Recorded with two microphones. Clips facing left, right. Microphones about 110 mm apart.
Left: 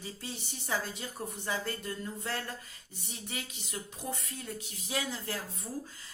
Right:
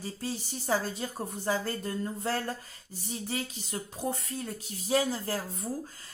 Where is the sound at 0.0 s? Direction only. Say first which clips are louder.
Right 6 dB; 40° right (ahead or behind).